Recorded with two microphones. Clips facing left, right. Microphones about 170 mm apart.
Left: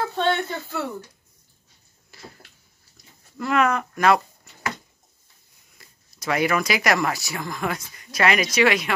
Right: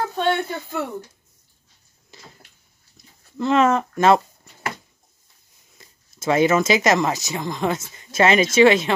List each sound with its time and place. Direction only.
0.2 s speech: 15° right (ahead or behind)
2.1 s a sound: 20° right (ahead or behind)
3.3 s speech: 25° right (ahead or behind)
5.8 s speech: 25° right (ahead or behind)